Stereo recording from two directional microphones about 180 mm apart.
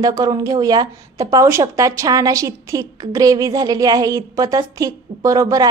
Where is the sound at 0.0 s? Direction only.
20° right (ahead or behind).